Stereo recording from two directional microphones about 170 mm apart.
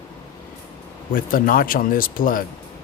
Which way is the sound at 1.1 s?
55° left (ahead or behind).